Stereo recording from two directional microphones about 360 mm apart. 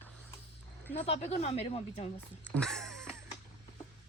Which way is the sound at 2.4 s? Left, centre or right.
Centre.